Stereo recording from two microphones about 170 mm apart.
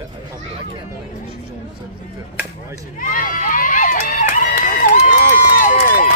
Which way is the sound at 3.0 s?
55° left (ahead or behind).